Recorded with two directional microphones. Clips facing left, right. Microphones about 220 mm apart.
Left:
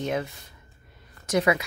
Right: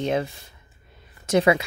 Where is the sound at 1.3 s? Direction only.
25° right (ahead or behind).